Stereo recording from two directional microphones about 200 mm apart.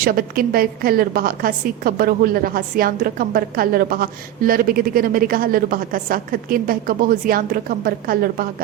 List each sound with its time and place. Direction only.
0.0 s a woman's voice: 45° right (ahead or behind)